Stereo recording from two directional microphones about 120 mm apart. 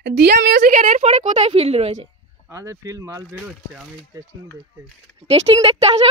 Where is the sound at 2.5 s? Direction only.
25° right (ahead or behind).